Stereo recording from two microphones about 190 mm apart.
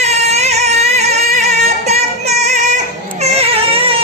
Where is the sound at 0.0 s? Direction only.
35° right (ahead or behind).